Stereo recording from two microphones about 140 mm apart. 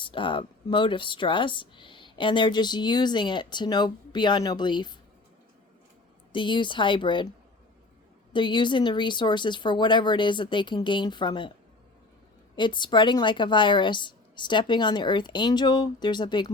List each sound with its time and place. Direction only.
0.0 s speech: 35° left (ahead or behind)
6.3 s speech: 35° left (ahead or behind)
8.3 s speech: 35° left (ahead or behind)
12.5 s speech: 35° left (ahead or behind)